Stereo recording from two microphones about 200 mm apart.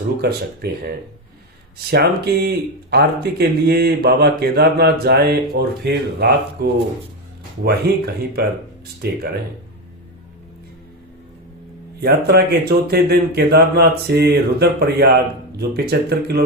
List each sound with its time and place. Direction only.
0.2 s speech: 55° right (ahead or behind)
1.9 s speech: 55° right (ahead or behind)
11.9 s speech: 55° right (ahead or behind)